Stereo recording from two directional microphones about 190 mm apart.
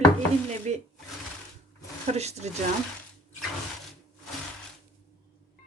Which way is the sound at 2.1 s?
35° right (ahead or behind).